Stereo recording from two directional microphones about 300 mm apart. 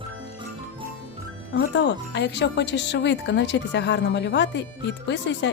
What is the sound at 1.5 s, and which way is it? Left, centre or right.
Speech, left.